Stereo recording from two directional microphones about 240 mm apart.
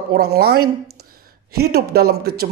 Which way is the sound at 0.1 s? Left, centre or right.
Right.